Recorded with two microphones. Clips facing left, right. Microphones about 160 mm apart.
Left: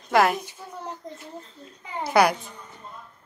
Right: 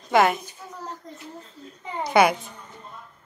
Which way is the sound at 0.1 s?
Centre (ahead or behind).